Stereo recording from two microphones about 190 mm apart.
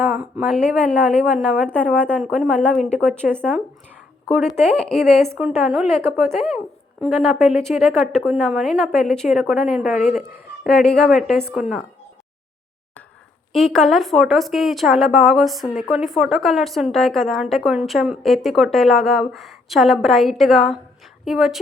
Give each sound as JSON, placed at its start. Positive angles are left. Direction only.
{"t": 0.0, "sound": "a woman's voice", "side_deg": -5}
{"t": 4.3, "sound": "a woman's voice", "side_deg": 0}
{"t": 13.5, "sound": "a woman's voice", "side_deg": 0}